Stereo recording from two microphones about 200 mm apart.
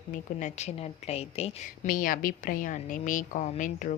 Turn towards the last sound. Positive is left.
turn(degrees=40)  # may be behind; listen again after turning